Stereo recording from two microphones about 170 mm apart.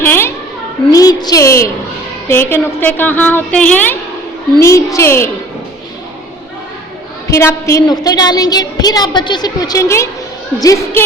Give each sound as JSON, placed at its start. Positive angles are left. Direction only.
{"t": 0.0, "sound": "children playing", "side_deg": 15}
{"t": 0.9, "sound": "a woman's voice", "side_deg": 20}
{"t": 7.3, "sound": "a woman's voice", "side_deg": 15}